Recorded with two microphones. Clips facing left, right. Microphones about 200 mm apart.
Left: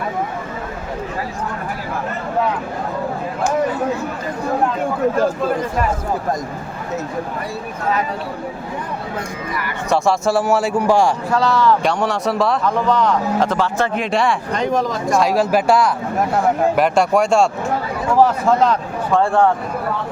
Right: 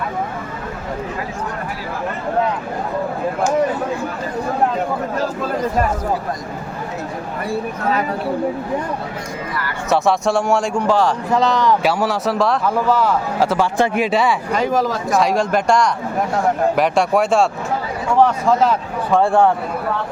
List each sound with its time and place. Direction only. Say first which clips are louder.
9.9 s speech: even; centre (ahead or behind)
11.3 s speech: even; 20° right (ahead or behind)
11.8 s speech: right 1 dB; 5° right (ahead or behind)
18.6 s speech: even; 10° right (ahead or behind)